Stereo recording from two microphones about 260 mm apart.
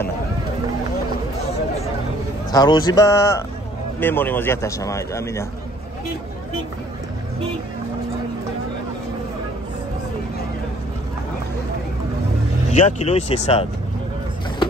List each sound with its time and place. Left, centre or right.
2.5 s speech: centre
12.7 s speech: left